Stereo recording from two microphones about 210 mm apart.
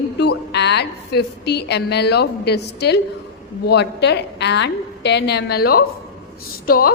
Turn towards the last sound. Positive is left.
turn(degrees=45)  # may be behind; listen again after turning